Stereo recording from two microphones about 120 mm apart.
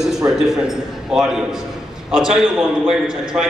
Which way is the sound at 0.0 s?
5° right (ahead or behind).